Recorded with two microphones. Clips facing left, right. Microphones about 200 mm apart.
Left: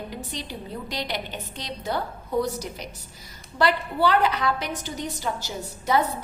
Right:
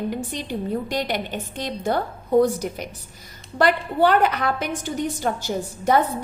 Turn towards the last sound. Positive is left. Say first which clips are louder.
# right 4 dB
turn(degrees=-55)  # may be behind; listen again after turning